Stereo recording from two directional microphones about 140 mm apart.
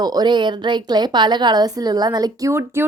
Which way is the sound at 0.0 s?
30° right (ahead or behind).